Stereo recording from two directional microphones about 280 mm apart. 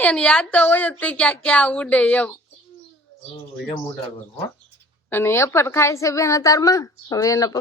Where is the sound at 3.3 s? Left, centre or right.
Centre.